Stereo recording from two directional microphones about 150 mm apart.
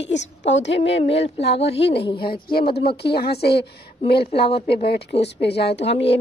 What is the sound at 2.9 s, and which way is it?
Speech, 90° left.